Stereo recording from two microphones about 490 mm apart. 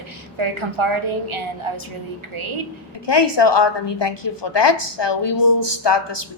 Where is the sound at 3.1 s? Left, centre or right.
Left.